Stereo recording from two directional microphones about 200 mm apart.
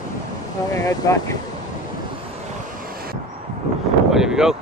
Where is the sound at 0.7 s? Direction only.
15° left (ahead or behind).